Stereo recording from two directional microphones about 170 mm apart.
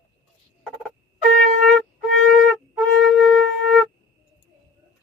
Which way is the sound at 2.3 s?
Centre (ahead or behind).